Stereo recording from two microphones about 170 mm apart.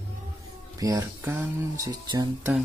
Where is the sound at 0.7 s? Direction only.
20° right (ahead or behind).